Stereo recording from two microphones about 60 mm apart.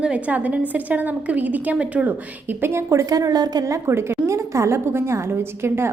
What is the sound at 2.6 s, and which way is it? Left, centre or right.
Speech, right.